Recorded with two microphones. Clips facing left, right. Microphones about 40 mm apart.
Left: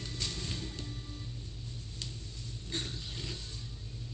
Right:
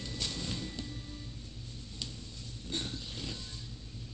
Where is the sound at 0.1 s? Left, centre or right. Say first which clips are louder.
Right 2 dB; right.